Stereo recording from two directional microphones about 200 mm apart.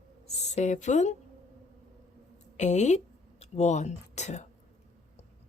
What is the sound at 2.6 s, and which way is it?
Speech, 35° left (ahead or behind).